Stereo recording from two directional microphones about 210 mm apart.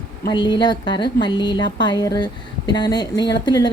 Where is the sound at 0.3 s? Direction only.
20° left (ahead or behind).